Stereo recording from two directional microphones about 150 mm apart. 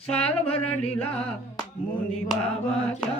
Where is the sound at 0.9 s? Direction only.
10° left (ahead or behind).